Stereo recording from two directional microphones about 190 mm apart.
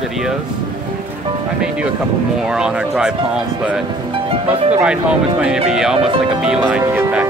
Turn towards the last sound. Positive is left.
turn(degrees=-10)  # may be behind; listen again after turning